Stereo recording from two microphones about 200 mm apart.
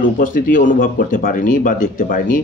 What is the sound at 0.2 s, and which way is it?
Speech, 40° left (ahead or behind).